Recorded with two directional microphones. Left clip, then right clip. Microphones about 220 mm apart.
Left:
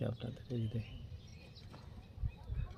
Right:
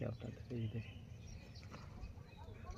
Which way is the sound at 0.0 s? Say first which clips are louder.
Left 4 dB; 45° left (ahead or behind).